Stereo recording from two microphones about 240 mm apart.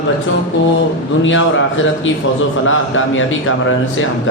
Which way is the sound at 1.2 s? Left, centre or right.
Left.